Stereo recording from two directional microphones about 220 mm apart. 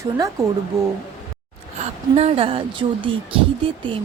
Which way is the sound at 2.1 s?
25° right (ahead or behind).